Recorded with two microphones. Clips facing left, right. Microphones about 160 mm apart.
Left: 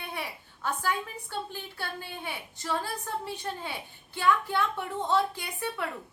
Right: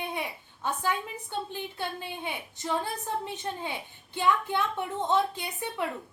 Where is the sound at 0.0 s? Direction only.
20° right (ahead or behind).